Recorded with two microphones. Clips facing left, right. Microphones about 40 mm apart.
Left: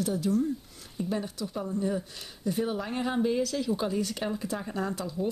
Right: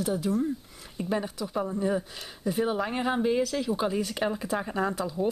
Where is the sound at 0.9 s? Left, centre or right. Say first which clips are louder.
Right 2 dB; right.